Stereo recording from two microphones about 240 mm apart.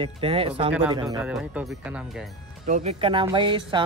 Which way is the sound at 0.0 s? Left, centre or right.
Right.